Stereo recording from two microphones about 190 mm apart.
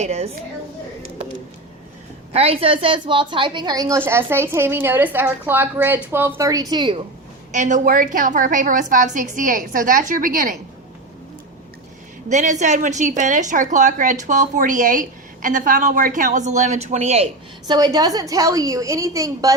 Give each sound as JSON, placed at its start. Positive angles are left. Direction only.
{"t": 0.0, "sound": "a woman's voice", "side_deg": -35}
{"t": 2.3, "sound": "a woman's voice", "side_deg": -30}
{"t": 7.5, "sound": "a woman's voice", "side_deg": -40}
{"t": 12.3, "sound": "a woman's voice", "side_deg": -40}
{"t": 17.7, "sound": "a woman's voice", "side_deg": -20}